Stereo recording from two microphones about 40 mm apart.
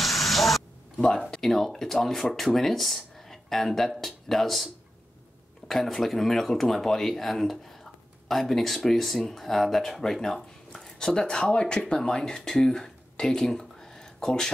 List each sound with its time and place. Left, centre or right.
0.0 s spray: centre
1.4 s speech: centre
5.7 s speech: centre
12.5 s a sound: centre